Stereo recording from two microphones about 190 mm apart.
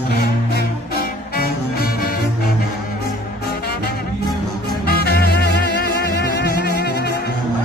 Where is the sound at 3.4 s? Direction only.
55° left (ahead or behind).